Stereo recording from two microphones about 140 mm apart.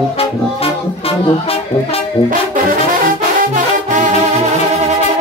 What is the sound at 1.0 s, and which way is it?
Music, 45° left (ahead or behind).